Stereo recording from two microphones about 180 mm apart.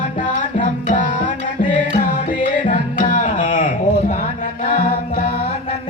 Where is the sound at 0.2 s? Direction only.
45° left (ahead or behind).